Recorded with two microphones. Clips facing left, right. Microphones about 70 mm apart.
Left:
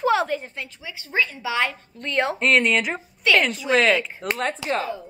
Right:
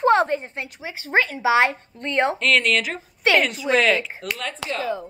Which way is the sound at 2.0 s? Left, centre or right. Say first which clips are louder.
Right 2 dB; right.